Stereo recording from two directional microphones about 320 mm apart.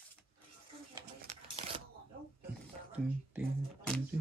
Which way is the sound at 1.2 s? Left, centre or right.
Right.